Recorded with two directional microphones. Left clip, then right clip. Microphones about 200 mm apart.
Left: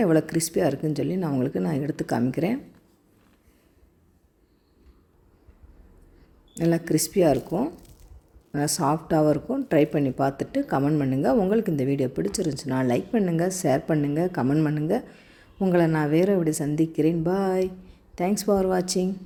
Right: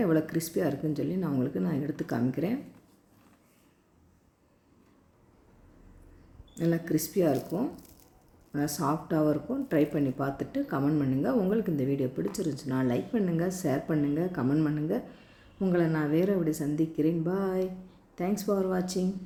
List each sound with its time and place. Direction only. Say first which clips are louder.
0.0 s speech: left 6 dB; 35° left (ahead or behind)
6.5 s speech: left 5 dB; 40° left (ahead or behind)
8.5 s speech: left 6 dB; 35° left (ahead or behind)